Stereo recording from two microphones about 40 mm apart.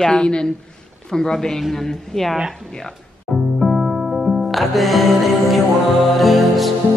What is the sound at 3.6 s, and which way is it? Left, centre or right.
Music, centre.